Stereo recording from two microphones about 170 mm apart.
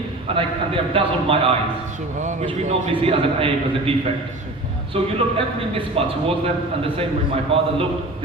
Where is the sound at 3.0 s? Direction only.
35° right (ahead or behind).